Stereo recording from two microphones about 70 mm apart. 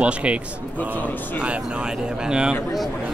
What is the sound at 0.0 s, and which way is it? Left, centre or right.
Speech, centre.